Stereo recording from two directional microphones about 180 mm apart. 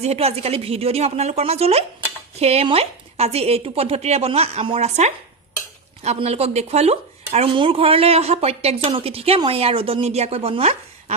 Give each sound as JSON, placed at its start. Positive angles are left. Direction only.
{"t": 0.0, "sound": "speech", "side_deg": -35}